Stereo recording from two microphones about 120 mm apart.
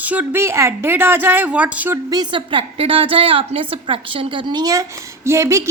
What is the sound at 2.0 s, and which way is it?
A woman's voice, 35° right (ahead or behind).